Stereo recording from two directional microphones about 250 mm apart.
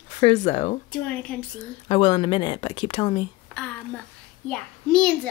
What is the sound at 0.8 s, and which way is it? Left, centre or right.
Speech, centre.